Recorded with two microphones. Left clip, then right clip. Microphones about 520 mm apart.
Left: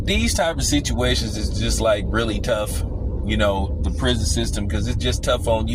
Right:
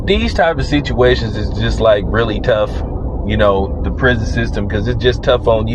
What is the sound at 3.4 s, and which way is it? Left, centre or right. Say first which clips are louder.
Speech: right 9 dB; left.